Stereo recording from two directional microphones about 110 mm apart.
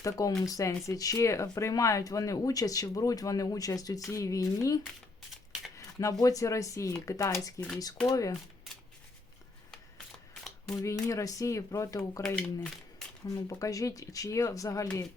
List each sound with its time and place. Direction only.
0.0 s speech: 30° left (ahead or behind)
5.3 s shuffling cards: centre (ahead or behind)
5.7 s speech: 30° left (ahead or behind)
10.7 s speech: 30° left (ahead or behind)
12.4 s speech: 10° left (ahead or behind)
13.2 s speech: 30° left (ahead or behind)